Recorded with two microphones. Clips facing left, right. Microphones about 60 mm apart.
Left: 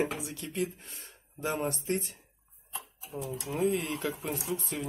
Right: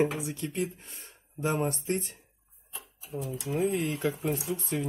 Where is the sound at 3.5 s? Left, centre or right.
Right.